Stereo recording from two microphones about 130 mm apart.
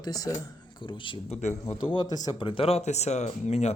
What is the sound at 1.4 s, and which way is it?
Speech, 60° left (ahead or behind).